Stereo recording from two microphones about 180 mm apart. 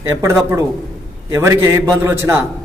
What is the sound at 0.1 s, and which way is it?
A man's voice, 15° right (ahead or behind).